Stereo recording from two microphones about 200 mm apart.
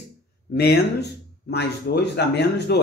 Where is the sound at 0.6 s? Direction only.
55° left (ahead or behind).